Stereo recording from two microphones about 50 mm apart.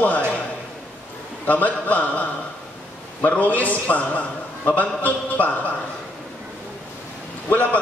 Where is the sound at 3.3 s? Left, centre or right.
Left.